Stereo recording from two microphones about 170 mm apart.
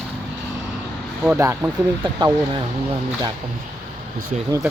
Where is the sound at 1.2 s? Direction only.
15° right (ahead or behind).